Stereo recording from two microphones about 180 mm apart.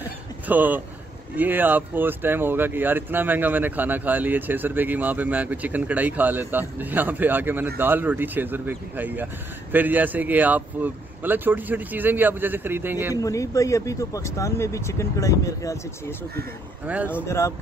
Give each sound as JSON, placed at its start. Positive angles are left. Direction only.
{"t": 0.0, "sound": "a sound", "side_deg": -10}
{"t": 1.3, "sound": "speech", "side_deg": -10}
{"t": 13.1, "sound": "speech", "side_deg": 20}
{"t": 16.8, "sound": "speech", "side_deg": -10}
{"t": 17.1, "sound": "speech", "side_deg": 15}